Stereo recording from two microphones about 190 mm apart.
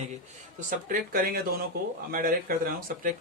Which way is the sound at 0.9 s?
45° right (ahead or behind).